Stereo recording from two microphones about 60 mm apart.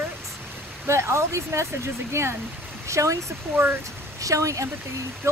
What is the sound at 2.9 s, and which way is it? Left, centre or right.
Speech, right.